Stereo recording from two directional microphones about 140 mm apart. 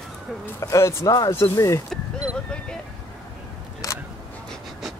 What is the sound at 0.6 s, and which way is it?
Speech, 20° left (ahead or behind).